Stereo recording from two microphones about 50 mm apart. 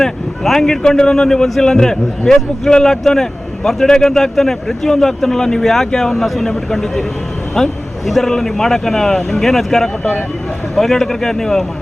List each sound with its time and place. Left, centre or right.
0.0 s a man's voice: centre
10.0 s speech: left
10.8 s speech: centre